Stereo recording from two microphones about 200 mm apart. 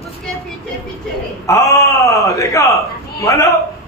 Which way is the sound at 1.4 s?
15° left (ahead or behind).